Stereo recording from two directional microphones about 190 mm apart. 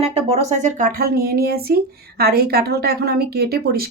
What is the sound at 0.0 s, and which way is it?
Speech, 35° right (ahead or behind).